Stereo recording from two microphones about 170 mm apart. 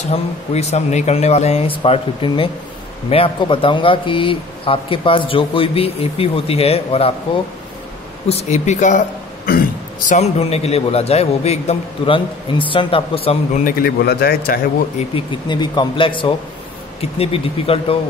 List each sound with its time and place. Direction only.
0.0 s speech: 40° left (ahead or behind)
8.3 s speech: 40° left (ahead or behind)
13.7 s speech: 65° left (ahead or behind)
15.0 s speech: 30° left (ahead or behind)